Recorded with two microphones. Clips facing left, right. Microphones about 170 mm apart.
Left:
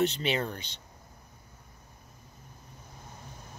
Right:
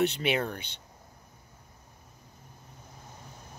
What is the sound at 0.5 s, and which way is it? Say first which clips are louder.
Speech: right 1 dB; 55° right (ahead or behind).